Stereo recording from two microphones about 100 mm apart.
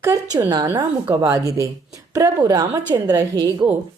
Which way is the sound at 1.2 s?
35° right (ahead or behind).